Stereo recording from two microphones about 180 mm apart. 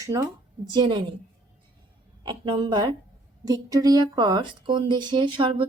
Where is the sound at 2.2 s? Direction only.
30° right (ahead or behind).